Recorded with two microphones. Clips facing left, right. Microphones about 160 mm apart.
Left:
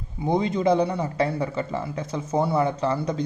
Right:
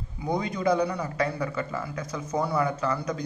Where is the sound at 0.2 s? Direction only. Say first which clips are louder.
Left 5 dB; 25° left (ahead or behind).